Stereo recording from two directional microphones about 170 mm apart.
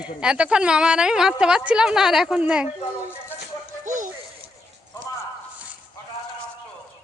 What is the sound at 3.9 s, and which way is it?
Music, 50° right (ahead or behind).